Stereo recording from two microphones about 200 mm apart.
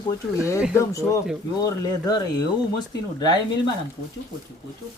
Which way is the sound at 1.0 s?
5° right (ahead or behind).